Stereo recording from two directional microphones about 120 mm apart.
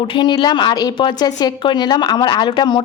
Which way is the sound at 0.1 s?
45° left (ahead or behind).